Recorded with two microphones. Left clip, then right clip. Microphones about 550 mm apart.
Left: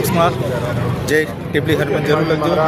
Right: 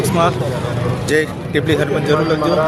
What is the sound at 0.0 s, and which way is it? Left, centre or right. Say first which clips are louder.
Vehicle: even; left.